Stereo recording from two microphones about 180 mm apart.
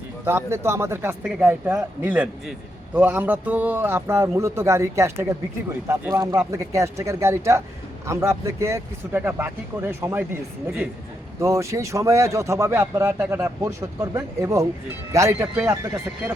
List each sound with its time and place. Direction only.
0.3 s a man's voice: 15° right (ahead or behind)
11.3 s a man's voice: 15° right (ahead or behind)